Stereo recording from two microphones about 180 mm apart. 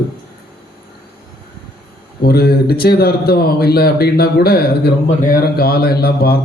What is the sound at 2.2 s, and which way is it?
A man's voice, 60° left (ahead or behind).